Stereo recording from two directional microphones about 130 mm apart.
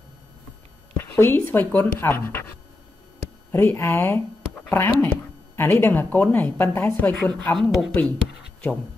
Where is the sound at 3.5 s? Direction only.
15° left (ahead or behind).